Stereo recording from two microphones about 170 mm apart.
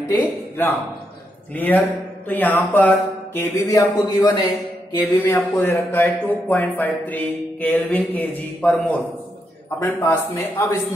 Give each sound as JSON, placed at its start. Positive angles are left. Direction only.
{"t": 1.5, "sound": "speech", "side_deg": 10}
{"t": 5.0, "sound": "speech", "side_deg": 10}